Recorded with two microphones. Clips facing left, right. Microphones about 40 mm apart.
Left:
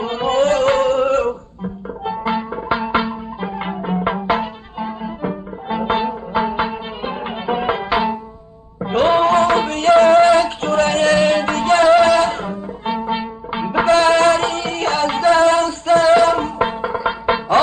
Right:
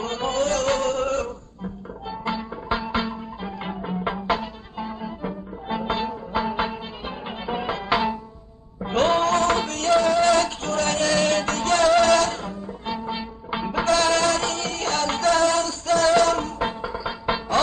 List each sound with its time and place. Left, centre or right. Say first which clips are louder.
0.0 s music: left 6 dB; centre
0.3 s music: left 8 dB; left
3.0 s music: left 6 dB; left
7.9 s music: left 4 dB; centre; by 17.6 s left